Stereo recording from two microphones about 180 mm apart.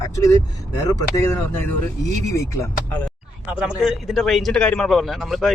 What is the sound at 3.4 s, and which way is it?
Speech, 10° right (ahead or behind).